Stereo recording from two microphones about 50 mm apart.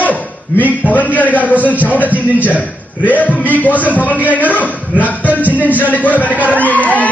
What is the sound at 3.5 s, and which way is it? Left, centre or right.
Speech, left.